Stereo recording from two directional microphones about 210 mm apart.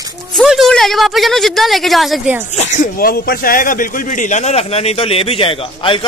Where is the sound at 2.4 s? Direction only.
35° left (ahead or behind).